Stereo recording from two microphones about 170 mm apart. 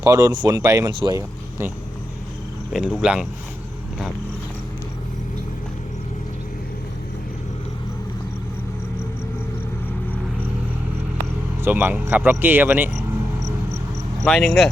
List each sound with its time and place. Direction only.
0.0 s speech: 20° right (ahead or behind)
2.7 s speech: 5° right (ahead or behind)
11.6 s speech: 10° right (ahead or behind)
14.3 s speech: 5° left (ahead or behind)